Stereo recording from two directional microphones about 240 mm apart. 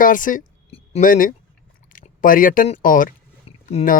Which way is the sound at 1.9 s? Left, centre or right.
Left.